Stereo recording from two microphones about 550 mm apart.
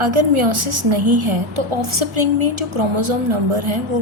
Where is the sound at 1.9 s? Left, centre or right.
Right.